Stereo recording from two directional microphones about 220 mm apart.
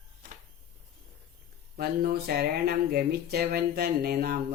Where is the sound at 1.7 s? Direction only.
45° right (ahead or behind).